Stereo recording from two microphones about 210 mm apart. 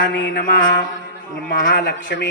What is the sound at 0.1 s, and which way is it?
Mantra, 55° left (ahead or behind).